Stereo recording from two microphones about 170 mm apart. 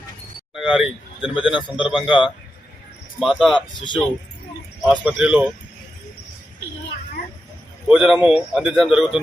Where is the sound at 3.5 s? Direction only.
30° left (ahead or behind).